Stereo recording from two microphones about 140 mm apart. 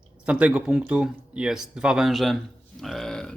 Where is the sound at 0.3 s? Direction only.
10° right (ahead or behind).